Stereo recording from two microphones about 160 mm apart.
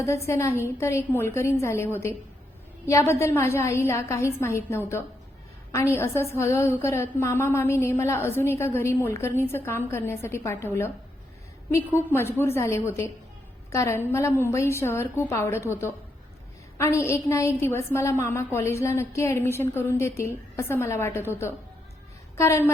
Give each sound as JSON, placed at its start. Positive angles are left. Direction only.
{"t": 0.0, "sound": "a woman's voice", "side_deg": 15}